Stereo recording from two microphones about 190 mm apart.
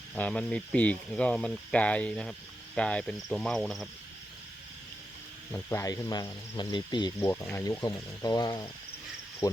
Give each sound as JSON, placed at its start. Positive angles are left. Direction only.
{"t": 0.2, "sound": "speech", "side_deg": 5}
{"t": 5.5, "sound": "speech", "side_deg": 10}